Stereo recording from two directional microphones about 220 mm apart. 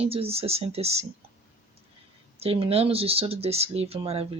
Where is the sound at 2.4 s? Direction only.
25° right (ahead or behind).